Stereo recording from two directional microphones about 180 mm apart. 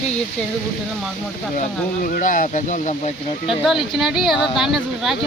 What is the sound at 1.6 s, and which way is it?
Speech, 50° left (ahead or behind).